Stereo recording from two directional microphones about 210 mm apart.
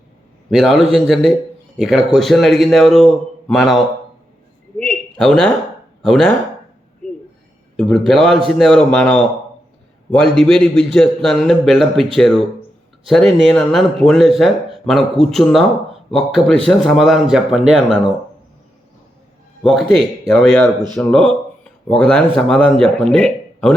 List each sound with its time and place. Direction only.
0.5 s a man's voice: centre (ahead or behind)
7.8 s speech: 5° left (ahead or behind)
19.6 s speech: centre (ahead or behind)